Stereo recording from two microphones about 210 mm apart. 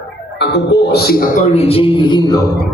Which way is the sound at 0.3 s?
55° left (ahead or behind).